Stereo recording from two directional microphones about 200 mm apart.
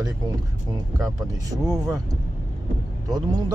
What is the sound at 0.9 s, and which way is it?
Speech, 15° right (ahead or behind).